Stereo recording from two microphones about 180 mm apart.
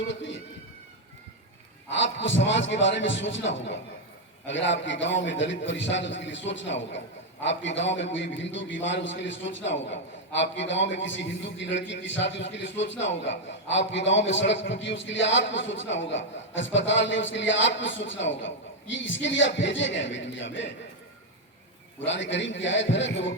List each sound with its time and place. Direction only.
0.1 s a sound: 90° left
1.9 s a man's voice: 90° left
22.0 s a man's voice: 90° left